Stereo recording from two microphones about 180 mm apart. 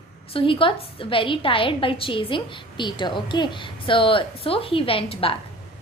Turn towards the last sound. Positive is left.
turn(degrees=30)  # may be behind; listen again after turning